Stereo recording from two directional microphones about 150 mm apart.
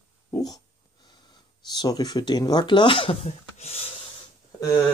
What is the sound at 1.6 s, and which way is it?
Speech, 25° left (ahead or behind).